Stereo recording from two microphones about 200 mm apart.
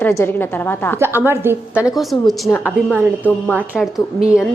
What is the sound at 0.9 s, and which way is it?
A woman's voice, 10° right (ahead or behind).